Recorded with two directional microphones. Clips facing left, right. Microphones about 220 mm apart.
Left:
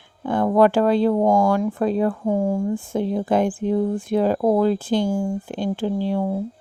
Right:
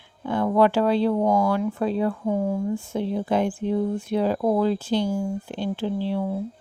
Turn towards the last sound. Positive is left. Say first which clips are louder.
# left 3 dB
turn(degrees=45)  # may be behind; listen again after turning